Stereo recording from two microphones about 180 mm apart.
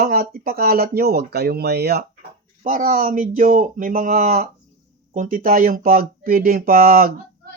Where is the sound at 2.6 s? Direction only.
50° right (ahead or behind).